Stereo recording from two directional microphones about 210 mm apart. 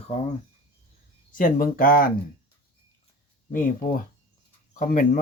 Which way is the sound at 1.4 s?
40° left (ahead or behind).